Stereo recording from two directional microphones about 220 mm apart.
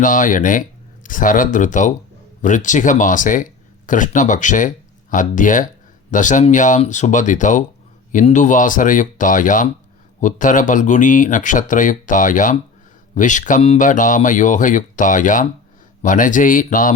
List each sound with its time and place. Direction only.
0.0 s speech: 35° left (ahead or behind)